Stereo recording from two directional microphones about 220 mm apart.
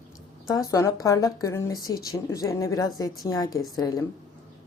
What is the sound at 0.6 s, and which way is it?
A woman's voice, 15° left (ahead or behind).